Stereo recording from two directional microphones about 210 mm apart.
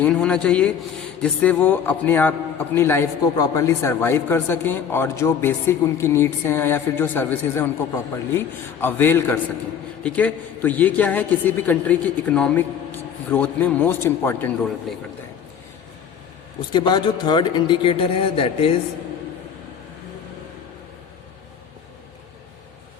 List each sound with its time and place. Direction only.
0.0 s a man's voice: 5° left (ahead or behind)
16.7 s speech: 20° left (ahead or behind)